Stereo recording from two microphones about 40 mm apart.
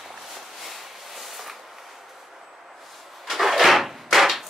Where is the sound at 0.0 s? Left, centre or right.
Centre.